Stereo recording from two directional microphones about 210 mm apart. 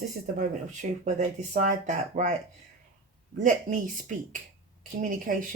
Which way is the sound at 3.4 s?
40° right (ahead or behind).